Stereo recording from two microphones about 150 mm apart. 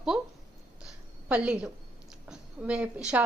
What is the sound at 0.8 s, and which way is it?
A woman's voice, 5° right (ahead or behind).